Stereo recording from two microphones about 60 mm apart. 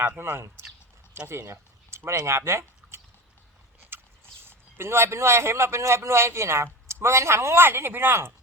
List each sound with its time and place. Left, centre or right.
0.2 s speech: right
1.3 s a sound: right
2.0 s speech: right
4.4 s a man's voice: right